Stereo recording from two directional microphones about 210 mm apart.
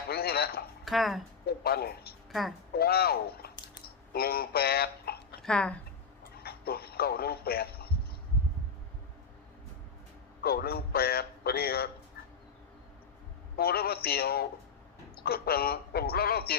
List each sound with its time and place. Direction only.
0.1 s speech: 50° left (ahead or behind)
0.9 s speech: centre (ahead or behind)
1.5 s a man's voice: 50° left (ahead or behind)
5.4 s speech: 5° left (ahead or behind)
6.3 s speech: 50° left (ahead or behind)
10.4 s a man's voice: 45° left (ahead or behind)
13.6 s a man's voice: 45° left (ahead or behind)